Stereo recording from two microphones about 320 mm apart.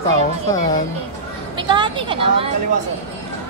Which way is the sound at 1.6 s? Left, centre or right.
Centre.